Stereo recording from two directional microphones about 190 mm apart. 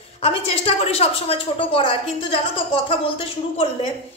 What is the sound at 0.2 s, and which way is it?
A woman's voice, 30° left (ahead or behind).